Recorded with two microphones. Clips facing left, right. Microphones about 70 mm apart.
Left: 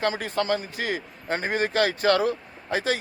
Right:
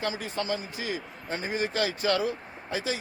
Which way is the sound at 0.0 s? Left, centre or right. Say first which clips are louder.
Left 6 dB; left.